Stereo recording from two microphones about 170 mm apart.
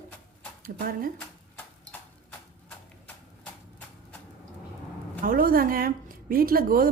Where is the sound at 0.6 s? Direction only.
60° right (ahead or behind).